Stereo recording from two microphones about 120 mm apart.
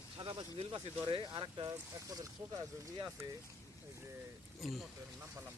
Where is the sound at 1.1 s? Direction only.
45° right (ahead or behind); by 3.2 s 30° right (ahead or behind).